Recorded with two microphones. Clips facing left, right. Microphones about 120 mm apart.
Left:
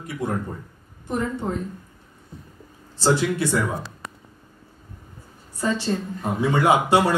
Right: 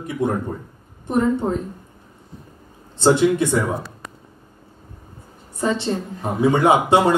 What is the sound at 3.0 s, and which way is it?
Speech, 25° right (ahead or behind).